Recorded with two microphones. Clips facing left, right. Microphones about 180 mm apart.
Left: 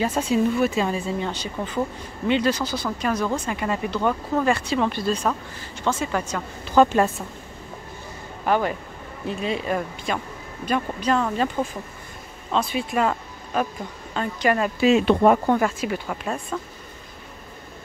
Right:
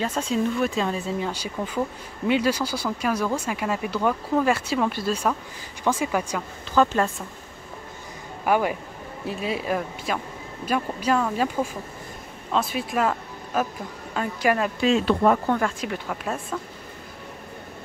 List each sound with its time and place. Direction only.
0.0 s speech: 10° left (ahead or behind); by 6.4 s 10° right (ahead or behind)
6.7 s speech: 15° left (ahead or behind)
8.5 s speech: 10° right (ahead or behind); by 15.0 s 5° left (ahead or behind)
15.0 s speech: 15° left (ahead or behind)
15.8 s speech: centre (ahead or behind)